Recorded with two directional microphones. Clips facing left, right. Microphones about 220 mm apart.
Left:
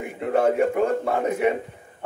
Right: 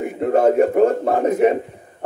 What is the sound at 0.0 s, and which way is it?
A man's voice, 40° right (ahead or behind).